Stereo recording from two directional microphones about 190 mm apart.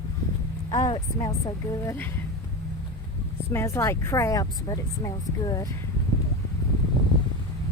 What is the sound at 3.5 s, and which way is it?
Speech, 15° left (ahead or behind).